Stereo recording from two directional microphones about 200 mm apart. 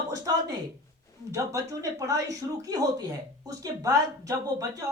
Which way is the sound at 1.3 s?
15° right (ahead or behind).